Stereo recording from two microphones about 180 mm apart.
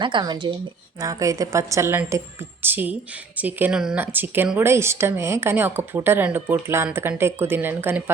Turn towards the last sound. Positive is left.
turn(degrees=-10)  # may be behind; listen again after turning